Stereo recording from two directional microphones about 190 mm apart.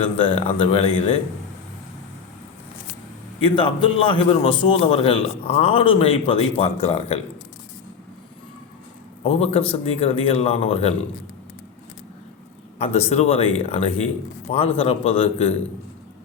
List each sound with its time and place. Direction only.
0.0 s a man's voice: 30° left (ahead or behind)
3.4 s a man's voice: 25° left (ahead or behind)
9.2 s a man's voice: 35° left (ahead or behind)
12.8 s a man's voice: 35° left (ahead or behind)